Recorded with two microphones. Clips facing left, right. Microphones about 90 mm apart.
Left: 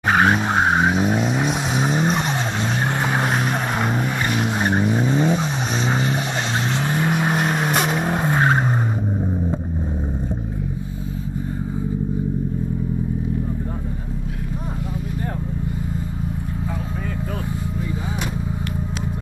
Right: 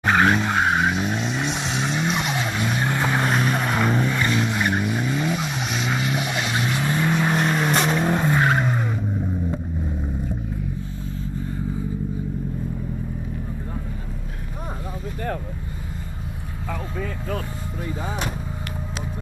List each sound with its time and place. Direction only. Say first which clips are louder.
0.1 s vehicle: left 2 dB; 30° left (ahead or behind)
0.7 s vehicle: left 3 dB; 45° left (ahead or behind); by 3.3 s 20° left (ahead or behind)
3.3 s vehicle: even; 35° left (ahead or behind)
4.0 s boat: even; 20° left (ahead or behind)
4.6 s vehicle: left 3 dB; 35° left (ahead or behind)
7.6 s vehicle: even; 10° left (ahead or behind)
8.1 s vehicle: left 1 dB; 25° left (ahead or behind)
9.2 s vehicle: left 3 dB; 25° left (ahead or behind)